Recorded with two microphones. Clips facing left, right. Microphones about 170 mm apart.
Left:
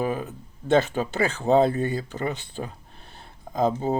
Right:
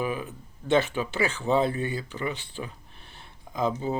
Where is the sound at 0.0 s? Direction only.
40° left (ahead or behind).